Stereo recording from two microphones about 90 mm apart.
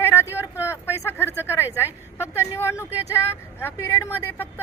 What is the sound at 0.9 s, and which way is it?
A woman's voice, 30° left (ahead or behind).